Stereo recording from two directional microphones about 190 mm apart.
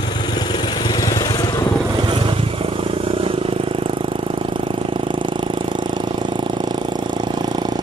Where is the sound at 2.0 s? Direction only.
25° right (ahead or behind).